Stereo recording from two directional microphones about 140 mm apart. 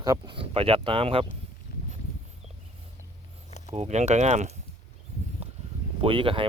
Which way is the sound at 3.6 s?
50° right (ahead or behind).